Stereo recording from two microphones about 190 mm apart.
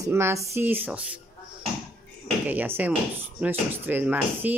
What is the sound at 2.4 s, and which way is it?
A woman's voice, 10° right (ahead or behind).